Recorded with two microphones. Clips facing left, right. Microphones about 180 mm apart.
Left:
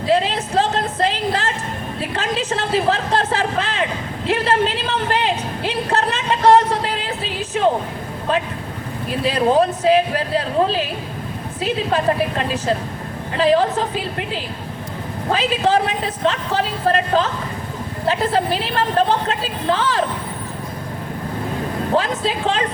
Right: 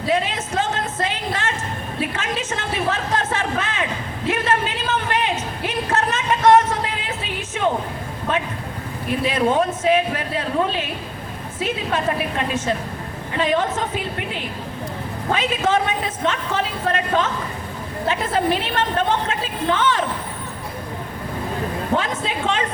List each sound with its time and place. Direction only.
0.1 s a sound: 35° left (ahead or behind)
2.0 s a man's voice: 35° left (ahead or behind)
5.9 s a sound: 35° left (ahead or behind)
9.2 s a man's voice: 35° left (ahead or behind)
15.3 s a man's voice: 35° left (ahead or behind)
18.9 s a man's voice: 35° left (ahead or behind)
21.9 s a man's voice: 35° left (ahead or behind)